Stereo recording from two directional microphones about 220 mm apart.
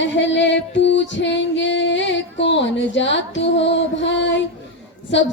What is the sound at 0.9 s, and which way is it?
Female singing, 55° left (ahead or behind).